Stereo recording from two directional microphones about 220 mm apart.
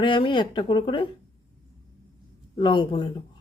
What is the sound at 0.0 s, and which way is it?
A woman's voice, 20° left (ahead or behind).